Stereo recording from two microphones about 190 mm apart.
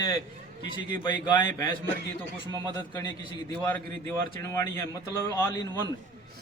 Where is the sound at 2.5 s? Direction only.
25° right (ahead or behind).